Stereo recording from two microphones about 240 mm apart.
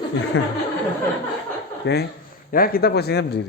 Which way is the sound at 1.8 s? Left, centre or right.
Left.